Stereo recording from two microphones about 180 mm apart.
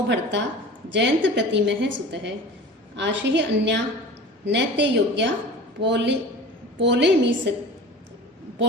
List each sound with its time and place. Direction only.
0.1 s a woman's voice: 75° right (ahead or behind)